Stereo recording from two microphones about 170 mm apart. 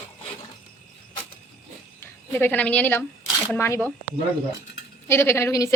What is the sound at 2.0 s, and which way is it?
A woman's voice, 10° left (ahead or behind).